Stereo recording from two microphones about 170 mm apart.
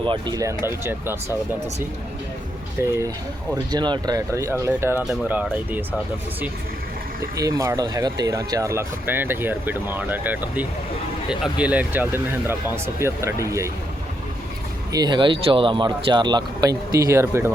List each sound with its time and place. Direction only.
0.0 s speech: 25° right (ahead or behind)
2.8 s speech: 15° right (ahead or behind)
3.5 s speech: 25° right (ahead or behind); by 5.8 s 10° right (ahead or behind)
7.3 s speech: 20° right (ahead or behind)
14.9 s speech: 25° right (ahead or behind)